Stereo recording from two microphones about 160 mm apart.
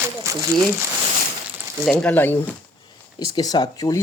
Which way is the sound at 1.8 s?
5° left (ahead or behind).